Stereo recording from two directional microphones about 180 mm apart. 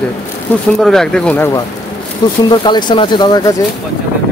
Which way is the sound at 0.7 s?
Centre (ahead or behind).